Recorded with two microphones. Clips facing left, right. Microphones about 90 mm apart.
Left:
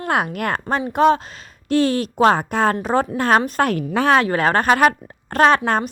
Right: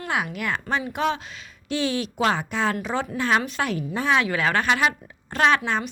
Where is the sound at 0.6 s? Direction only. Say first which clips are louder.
Left 10 dB; 35° left (ahead or behind); by 4.2 s 65° left (ahead or behind).